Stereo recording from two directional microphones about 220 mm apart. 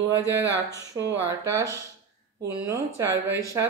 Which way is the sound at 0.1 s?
55° right (ahead or behind).